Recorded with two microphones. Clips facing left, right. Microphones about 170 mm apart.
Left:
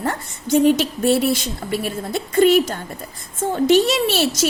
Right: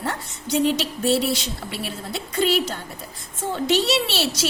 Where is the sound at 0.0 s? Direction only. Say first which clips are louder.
Left 4 dB; 50° left (ahead or behind).